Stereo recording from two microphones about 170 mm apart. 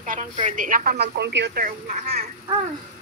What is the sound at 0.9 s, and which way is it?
Speech, 80° right.